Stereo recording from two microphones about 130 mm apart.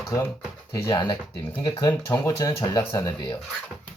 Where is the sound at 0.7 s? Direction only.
25° left (ahead or behind).